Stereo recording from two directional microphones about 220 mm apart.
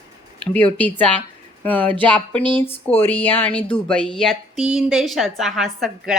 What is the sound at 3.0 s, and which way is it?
Speech, 10° left (ahead or behind).